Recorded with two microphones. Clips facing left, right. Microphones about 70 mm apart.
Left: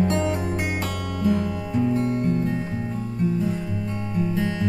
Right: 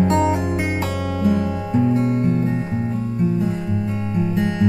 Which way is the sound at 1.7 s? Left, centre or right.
Centre.